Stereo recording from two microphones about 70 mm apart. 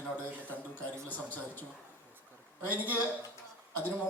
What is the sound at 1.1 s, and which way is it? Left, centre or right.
Speech, left.